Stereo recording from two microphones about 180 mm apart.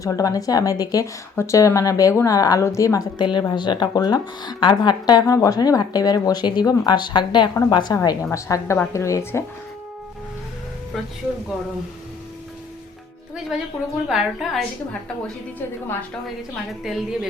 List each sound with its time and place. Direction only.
0.0 s a woman's voice: 20° left (ahead or behind)
13.5 s a woman's voice: 5° right (ahead or behind)
16.8 s a woman's voice: centre (ahead or behind)